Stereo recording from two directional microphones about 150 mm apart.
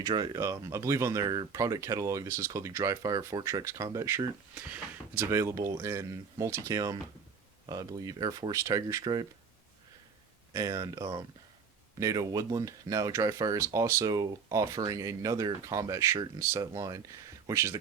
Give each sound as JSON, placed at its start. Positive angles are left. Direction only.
{"t": 0.0, "sound": "speech", "side_deg": -25}
{"t": 10.5, "sound": "speech", "side_deg": -20}